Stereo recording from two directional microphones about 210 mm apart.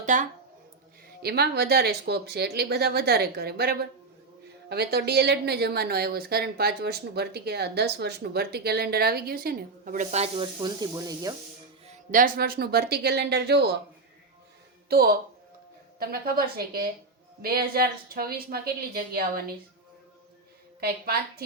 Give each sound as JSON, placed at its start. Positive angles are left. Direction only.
{"t": 0.0, "sound": "speech", "side_deg": -35}
{"t": 1.2, "sound": "speech", "side_deg": -50}
{"t": 11.9, "sound": "speech", "side_deg": -40}
{"t": 14.8, "sound": "speech", "side_deg": -50}
{"t": 20.8, "sound": "speech", "side_deg": -45}